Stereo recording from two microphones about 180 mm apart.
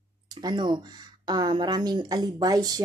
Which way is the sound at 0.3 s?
20° right (ahead or behind).